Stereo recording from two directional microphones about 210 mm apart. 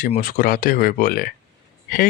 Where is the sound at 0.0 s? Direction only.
40° left (ahead or behind).